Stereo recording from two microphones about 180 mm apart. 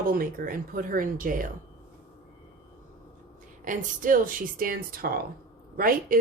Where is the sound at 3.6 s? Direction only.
50° right (ahead or behind).